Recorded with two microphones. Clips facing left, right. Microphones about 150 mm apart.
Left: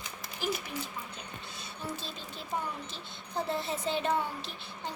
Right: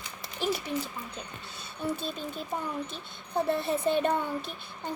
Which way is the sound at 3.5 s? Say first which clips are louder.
Right 6 dB; 60° right (ahead or behind).